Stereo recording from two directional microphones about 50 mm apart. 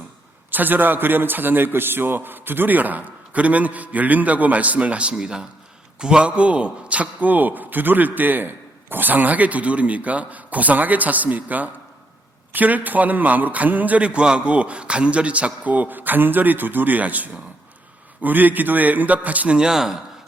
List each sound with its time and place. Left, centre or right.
0.5 s a man's voice: right
19.5 s speech: centre